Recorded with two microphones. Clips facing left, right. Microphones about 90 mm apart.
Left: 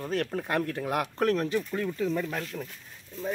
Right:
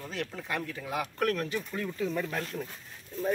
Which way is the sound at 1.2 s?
30° left (ahead or behind).